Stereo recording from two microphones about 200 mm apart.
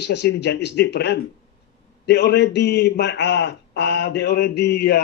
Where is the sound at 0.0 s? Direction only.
60° left (ahead or behind).